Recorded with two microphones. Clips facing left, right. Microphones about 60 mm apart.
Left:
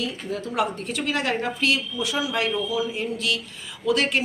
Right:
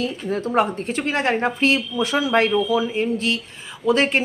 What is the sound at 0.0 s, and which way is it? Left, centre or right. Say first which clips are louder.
Speech: right 5 dB; right.